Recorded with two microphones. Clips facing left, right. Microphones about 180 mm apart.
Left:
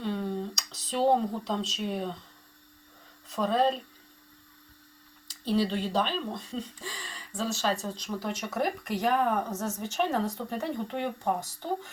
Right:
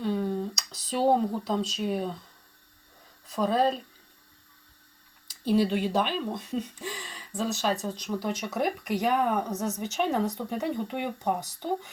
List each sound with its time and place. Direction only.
0.0 s a sound: 5° right (ahead or behind)
3.2 s speech: centre (ahead or behind)
5.5 s speech: 10° right (ahead or behind)